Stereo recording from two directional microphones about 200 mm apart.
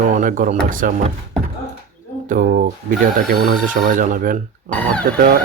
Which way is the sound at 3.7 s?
40° right (ahead or behind).